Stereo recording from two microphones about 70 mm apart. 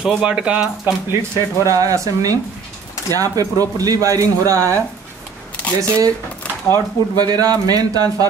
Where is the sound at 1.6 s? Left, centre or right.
Right.